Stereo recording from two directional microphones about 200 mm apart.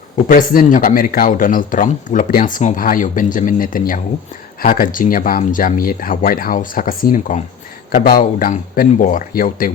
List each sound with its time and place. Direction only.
0.3 s speech: 45° left (ahead or behind)